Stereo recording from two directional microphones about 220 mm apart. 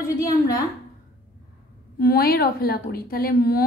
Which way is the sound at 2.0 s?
45° left (ahead or behind).